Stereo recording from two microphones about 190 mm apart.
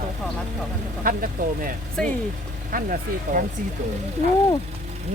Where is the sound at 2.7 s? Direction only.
45° right (ahead or behind).